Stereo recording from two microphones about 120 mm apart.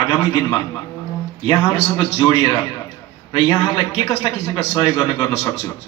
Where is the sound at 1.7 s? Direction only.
45° left (ahead or behind).